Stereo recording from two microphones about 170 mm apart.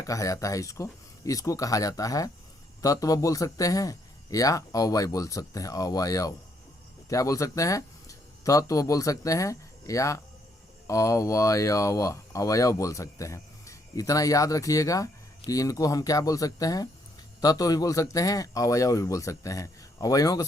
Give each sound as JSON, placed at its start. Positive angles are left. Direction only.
{"t": 0.0, "sound": "speech", "side_deg": 20}